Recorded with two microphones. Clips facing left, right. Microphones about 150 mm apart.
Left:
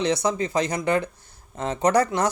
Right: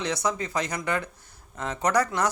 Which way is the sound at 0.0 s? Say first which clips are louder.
Left 5 dB; 25° left (ahead or behind).